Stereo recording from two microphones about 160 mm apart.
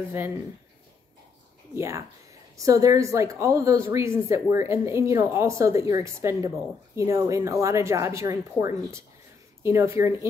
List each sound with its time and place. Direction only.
1.8 s speech: 20° right (ahead or behind)